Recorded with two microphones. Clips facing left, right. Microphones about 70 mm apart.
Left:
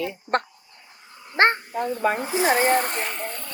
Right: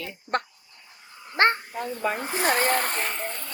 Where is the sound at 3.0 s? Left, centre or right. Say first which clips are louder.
Left 1 dB; right.